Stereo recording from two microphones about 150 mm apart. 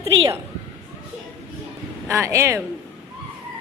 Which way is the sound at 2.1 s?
20° right (ahead or behind).